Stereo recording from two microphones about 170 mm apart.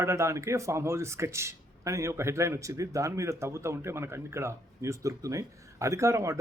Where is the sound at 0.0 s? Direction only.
15° right (ahead or behind).